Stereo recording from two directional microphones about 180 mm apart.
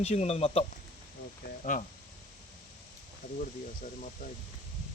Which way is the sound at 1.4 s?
45° left (ahead or behind).